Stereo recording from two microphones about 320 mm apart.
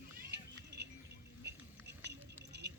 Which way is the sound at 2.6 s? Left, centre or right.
Right.